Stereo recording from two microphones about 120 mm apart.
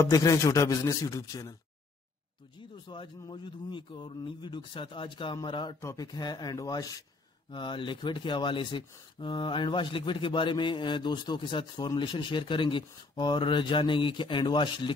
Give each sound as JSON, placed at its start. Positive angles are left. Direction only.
{"t": 0.0, "sound": "a man's voice", "side_deg": 30}
{"t": 2.9, "sound": "speech", "side_deg": 40}
{"t": 5.8, "sound": "speech", "side_deg": 25}
{"t": 7.5, "sound": "speech", "side_deg": 40}